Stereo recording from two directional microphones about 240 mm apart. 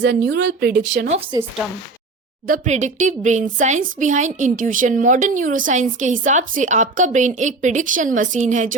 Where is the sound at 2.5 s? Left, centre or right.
Right.